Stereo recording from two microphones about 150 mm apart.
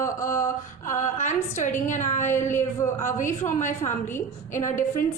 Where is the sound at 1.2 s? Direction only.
55° left (ahead or behind).